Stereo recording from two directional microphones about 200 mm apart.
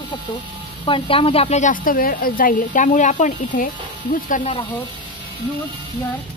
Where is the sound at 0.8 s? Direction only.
25° left (ahead or behind); by 4.4 s 45° left (ahead or behind).